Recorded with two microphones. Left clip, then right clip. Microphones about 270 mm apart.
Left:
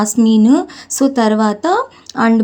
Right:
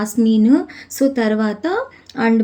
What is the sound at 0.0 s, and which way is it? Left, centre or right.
Speech, left.